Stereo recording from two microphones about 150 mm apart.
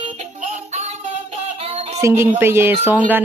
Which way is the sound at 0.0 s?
55° right (ahead or behind).